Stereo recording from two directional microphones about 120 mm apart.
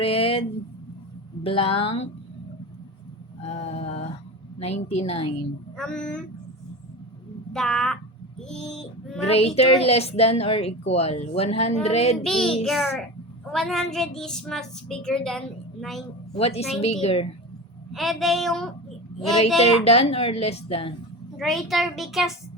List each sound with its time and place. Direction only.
0.0 s speech: 50° left (ahead or behind)
1.5 s a woman's voice: 50° left (ahead or behind)
3.4 s a sound: 60° left (ahead or behind)
4.6 s a woman's voice: 60° left (ahead or behind)
5.7 s speech: 5° left (ahead or behind)
7.5 s a woman's voice: 5° left (ahead or behind)
9.6 s a woman's voice: 60° left (ahead or behind)
12.2 s a woman's voice: 5° left (ahead or behind)
16.3 s a woman's voice: 55° left (ahead or behind)
17.9 s a woman's voice: centre (ahead or behind)
19.5 s a woman's voice: 60° left (ahead or behind)
21.3 s a woman's voice: centre (ahead or behind)